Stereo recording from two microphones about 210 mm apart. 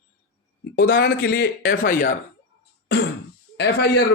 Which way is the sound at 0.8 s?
50° left (ahead or behind).